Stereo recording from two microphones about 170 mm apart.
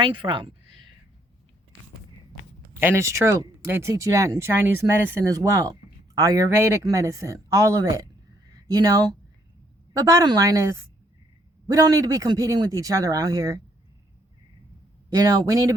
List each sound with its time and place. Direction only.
0.0 s speech: 30° right (ahead or behind)
2.8 s speech: 15° right (ahead or behind)
10.1 s speech: 20° right (ahead or behind)
15.1 s speech: 20° right (ahead or behind)